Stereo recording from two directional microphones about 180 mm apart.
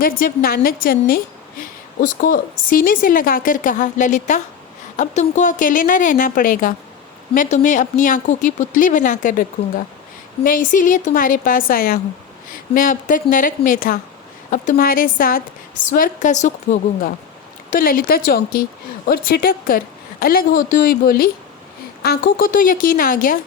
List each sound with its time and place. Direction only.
0.0 s a woman's voice: 55° left (ahead or behind)